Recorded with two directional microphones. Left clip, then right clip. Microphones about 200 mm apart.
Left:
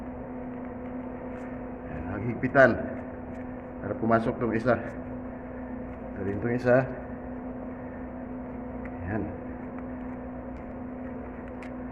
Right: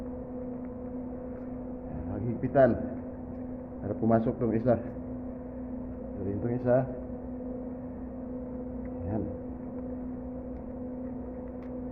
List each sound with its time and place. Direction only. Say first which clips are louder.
2.2 s a sound: left 3 dB; 5° left (ahead or behind)
3.8 s a man's voice: left 2 dB; 15° right (ahead or behind)
6.4 s a man's voice: left 4 dB; 15° left (ahead or behind)